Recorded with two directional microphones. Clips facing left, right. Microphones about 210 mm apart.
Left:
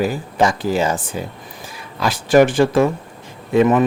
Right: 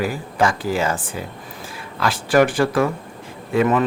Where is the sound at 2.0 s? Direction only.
20° left (ahead or behind).